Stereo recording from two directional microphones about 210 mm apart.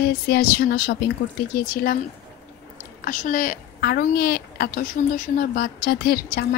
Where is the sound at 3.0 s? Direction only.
40° left (ahead or behind).